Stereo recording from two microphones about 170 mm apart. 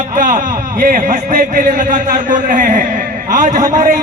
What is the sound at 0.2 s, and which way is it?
A man's voice, 50° right (ahead or behind).